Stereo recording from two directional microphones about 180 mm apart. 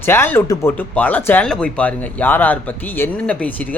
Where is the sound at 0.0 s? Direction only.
15° left (ahead or behind).